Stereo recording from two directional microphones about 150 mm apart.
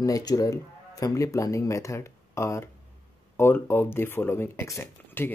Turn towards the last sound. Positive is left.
turn(degrees=15)  # may be behind; listen again after turning